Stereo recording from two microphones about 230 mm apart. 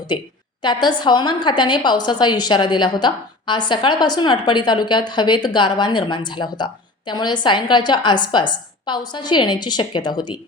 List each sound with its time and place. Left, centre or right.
0.6 s a woman's voice: centre